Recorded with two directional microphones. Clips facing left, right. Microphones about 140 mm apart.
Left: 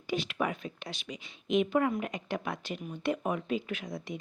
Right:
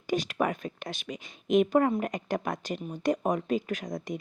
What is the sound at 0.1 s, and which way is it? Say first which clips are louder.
A woman's voice: right 4 dB; 45° right (ahead or behind).